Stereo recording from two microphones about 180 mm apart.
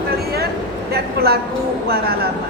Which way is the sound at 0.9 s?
60° right (ahead or behind).